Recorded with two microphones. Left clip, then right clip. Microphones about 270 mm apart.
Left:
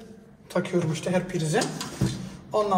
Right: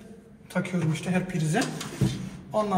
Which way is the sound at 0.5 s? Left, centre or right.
Left.